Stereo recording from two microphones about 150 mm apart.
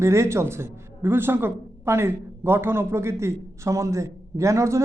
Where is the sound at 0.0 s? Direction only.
20° right (ahead or behind).